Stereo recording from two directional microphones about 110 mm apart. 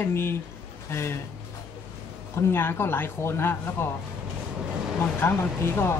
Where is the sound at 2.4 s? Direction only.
20° left (ahead or behind).